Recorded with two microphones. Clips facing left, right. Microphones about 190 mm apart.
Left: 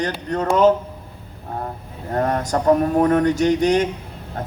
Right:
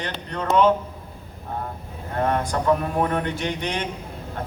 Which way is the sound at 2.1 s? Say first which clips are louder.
Left 3 dB; 40° left (ahead or behind).